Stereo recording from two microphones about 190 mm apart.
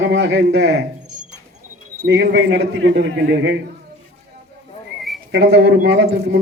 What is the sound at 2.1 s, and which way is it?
Speech, 65° right (ahead or behind).